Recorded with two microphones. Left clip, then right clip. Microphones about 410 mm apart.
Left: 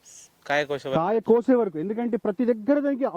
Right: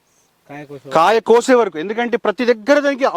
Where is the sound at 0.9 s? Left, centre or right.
Centre.